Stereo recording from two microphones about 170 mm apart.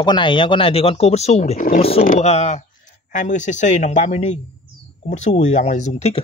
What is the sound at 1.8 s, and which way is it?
Speech, 35° left (ahead or behind).